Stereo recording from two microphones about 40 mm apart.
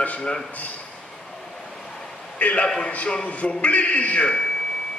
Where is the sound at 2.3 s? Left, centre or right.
Left.